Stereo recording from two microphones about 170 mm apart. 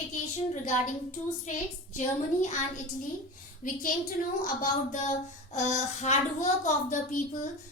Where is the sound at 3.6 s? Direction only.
50° left (ahead or behind).